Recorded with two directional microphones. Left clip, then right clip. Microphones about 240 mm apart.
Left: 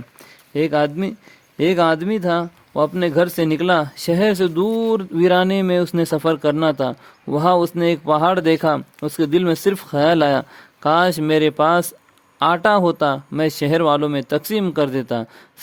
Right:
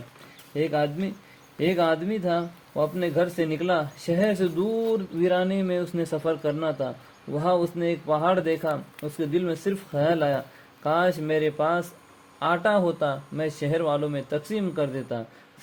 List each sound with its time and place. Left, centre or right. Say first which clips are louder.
0.5 s speech: left 7 dB; left